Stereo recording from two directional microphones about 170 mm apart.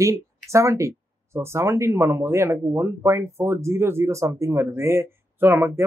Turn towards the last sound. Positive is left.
turn(degrees=-10)  # may be behind; listen again after turning